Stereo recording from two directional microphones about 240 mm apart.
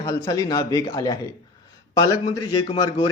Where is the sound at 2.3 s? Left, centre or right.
Centre.